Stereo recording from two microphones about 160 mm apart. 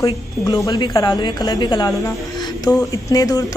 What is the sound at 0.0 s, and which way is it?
A woman's voice, 20° left (ahead or behind).